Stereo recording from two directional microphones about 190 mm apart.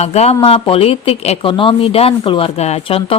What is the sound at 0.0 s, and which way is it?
A man's voice, 35° left (ahead or behind).